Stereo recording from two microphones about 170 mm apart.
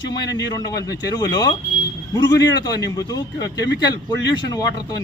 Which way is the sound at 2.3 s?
90° left.